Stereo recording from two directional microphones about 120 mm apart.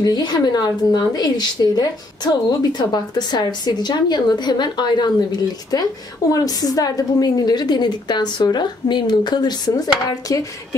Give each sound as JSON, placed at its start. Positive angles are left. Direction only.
{"t": 0.0, "sound": "a woman's voice", "side_deg": 35}
{"t": 6.3, "sound": "a woman's voice", "side_deg": 30}